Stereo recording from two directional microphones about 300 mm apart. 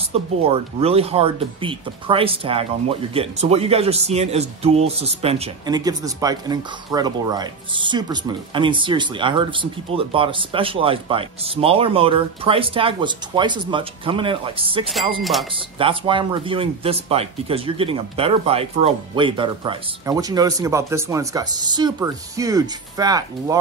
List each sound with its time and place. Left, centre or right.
0.1 s speech: centre